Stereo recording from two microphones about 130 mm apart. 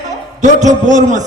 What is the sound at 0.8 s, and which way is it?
Speech, 70° right (ahead or behind).